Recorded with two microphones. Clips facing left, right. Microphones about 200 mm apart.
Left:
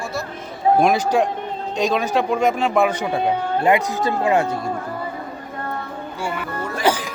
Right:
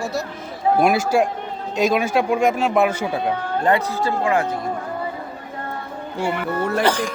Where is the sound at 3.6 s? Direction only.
15° left (ahead or behind).